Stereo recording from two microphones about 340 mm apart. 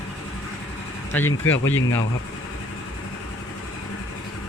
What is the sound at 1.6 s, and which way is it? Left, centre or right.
Speech, left.